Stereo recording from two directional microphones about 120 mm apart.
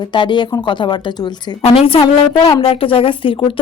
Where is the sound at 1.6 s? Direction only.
50° left (ahead or behind).